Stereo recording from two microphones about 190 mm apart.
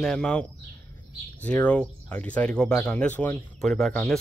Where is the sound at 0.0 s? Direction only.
5° left (ahead or behind).